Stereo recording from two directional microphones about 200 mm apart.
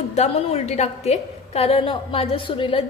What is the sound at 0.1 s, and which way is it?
A woman's voice, 30° left (ahead or behind).